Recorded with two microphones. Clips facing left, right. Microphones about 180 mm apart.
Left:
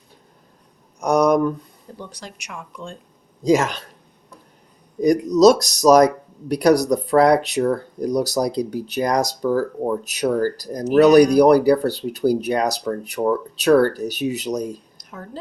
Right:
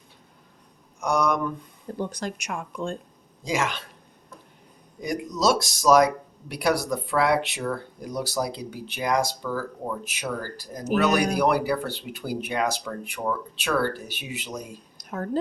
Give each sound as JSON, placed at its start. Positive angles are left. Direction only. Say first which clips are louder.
{"t": 0.9, "sound": "speech", "louder": "left 8 dB", "side_deg": 40}
{"t": 2.0, "sound": "speech", "louder": "right 7 dB", "side_deg": -50}
{"t": 3.4, "sound": "speech", "louder": "left 9 dB", "side_deg": 40}
{"t": 4.9, "sound": "speech", "louder": "left 13 dB", "side_deg": 40}
{"t": 14.9, "sound": "a sound", "louder": "right 7 dB", "side_deg": -50}